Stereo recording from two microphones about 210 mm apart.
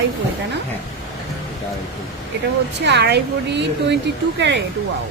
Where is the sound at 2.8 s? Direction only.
55° right (ahead or behind).